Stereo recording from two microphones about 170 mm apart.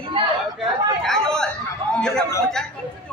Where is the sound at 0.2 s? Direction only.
30° right (ahead or behind).